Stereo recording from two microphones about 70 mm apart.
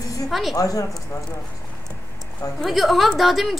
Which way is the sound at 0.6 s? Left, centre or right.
Left.